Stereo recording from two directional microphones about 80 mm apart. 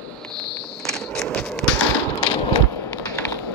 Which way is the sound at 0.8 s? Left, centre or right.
Centre.